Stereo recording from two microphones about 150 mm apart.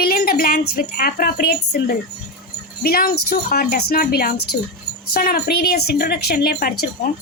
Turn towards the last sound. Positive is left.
turn(degrees=75)  # may be behind; listen again after turning